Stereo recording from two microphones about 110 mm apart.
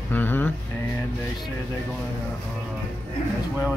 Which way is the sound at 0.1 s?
20° left (ahead or behind).